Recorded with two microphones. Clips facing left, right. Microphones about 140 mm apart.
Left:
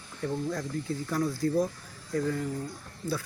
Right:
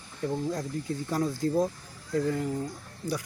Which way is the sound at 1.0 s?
20° right (ahead or behind).